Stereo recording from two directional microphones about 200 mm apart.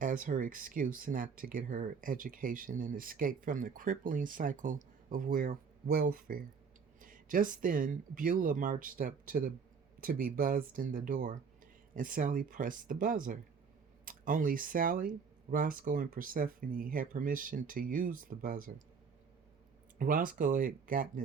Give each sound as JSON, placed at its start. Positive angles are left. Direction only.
{"t": 0.0, "sound": "speech", "side_deg": -45}
{"t": 20.0, "sound": "speech", "side_deg": -45}